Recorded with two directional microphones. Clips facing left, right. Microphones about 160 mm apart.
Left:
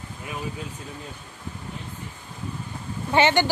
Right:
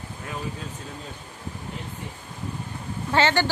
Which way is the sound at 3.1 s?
15° left (ahead or behind).